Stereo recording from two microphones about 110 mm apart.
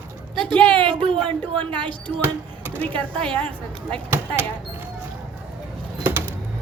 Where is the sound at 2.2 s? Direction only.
20° right (ahead or behind).